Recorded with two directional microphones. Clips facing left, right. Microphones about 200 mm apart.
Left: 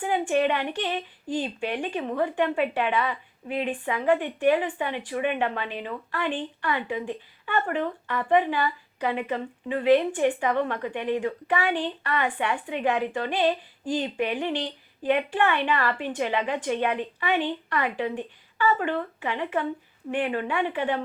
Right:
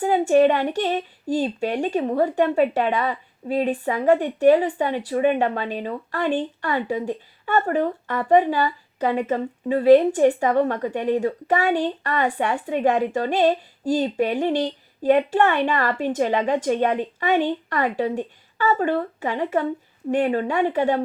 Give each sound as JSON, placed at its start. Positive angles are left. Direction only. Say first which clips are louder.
{"t": 0.0, "sound": "a woman's voice", "louder": "right 7 dB", "side_deg": -40}